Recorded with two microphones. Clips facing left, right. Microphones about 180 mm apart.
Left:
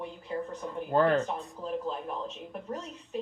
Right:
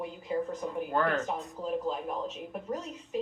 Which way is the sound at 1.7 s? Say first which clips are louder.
Right 2 dB; 10° right (ahead or behind).